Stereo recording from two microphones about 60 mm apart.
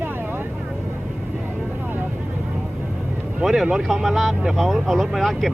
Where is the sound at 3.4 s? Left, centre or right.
Centre.